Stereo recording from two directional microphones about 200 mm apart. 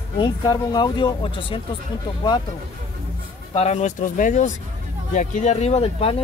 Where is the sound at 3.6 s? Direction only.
35° left (ahead or behind).